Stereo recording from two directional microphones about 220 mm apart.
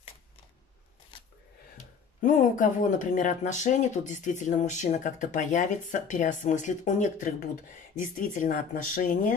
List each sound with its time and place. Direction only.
2.2 s speech: 35° left (ahead or behind)